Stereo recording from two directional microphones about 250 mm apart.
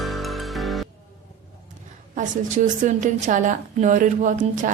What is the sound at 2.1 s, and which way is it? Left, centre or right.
A woman's voice, right.